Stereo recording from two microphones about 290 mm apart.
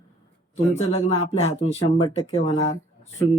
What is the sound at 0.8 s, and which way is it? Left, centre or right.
Speech, left.